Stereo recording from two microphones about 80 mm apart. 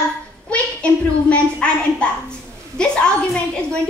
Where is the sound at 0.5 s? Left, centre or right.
Centre.